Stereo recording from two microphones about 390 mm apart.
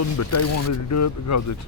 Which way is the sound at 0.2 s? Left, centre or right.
Left.